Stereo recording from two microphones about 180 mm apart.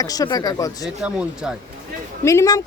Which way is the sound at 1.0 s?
5° right (ahead or behind).